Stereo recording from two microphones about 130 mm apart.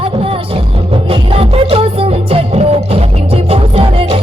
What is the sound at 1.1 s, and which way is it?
Music, 45° right (ahead or behind).